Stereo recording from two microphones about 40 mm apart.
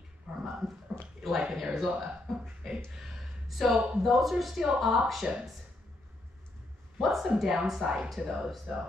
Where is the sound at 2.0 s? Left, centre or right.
Centre.